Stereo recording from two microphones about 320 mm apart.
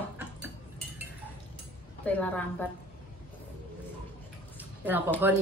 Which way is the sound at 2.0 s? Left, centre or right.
Centre.